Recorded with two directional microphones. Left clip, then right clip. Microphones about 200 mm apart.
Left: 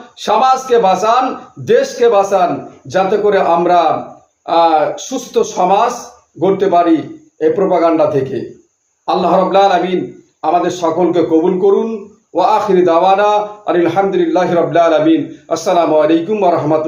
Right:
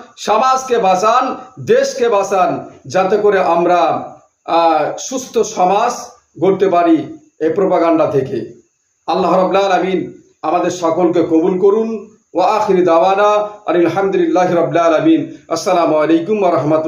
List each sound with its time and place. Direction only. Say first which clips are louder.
0.2 s a man's voice: left 1 dB; 5° right (ahead or behind)